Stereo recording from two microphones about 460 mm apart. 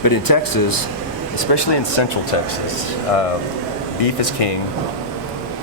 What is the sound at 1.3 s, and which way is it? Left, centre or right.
Speech, left.